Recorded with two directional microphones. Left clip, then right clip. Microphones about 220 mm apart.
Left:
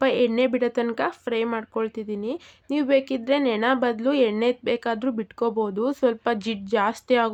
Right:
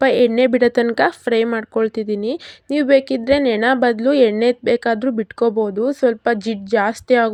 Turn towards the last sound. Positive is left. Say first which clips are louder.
# right 6 dB
turn(degrees=-15)  # may be behind; listen again after turning